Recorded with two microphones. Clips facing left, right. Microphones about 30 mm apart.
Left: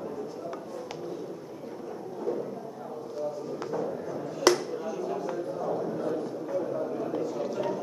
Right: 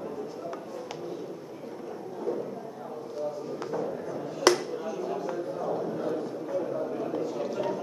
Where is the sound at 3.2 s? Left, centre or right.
Centre.